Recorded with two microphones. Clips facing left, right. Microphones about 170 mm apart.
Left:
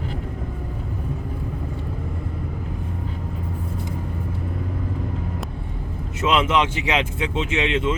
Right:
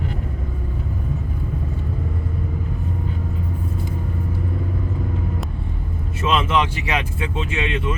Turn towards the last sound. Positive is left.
turn(degrees=20)  # may be behind; listen again after turning